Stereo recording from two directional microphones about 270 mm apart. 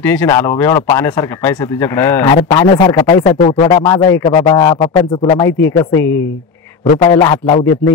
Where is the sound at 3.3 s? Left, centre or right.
Left.